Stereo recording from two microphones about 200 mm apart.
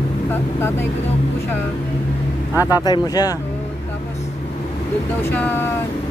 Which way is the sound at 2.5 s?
10° right (ahead or behind).